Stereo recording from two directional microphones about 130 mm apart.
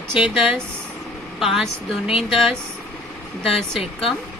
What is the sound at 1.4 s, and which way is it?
Speech, centre (ahead or behind).